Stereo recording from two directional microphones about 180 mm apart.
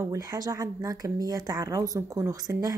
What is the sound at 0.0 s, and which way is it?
Speech, 20° right (ahead or behind).